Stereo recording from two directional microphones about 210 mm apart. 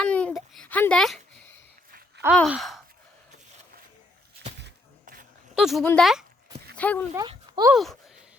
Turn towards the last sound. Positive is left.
turn(degrees=0)  # may be behind; listen again after turning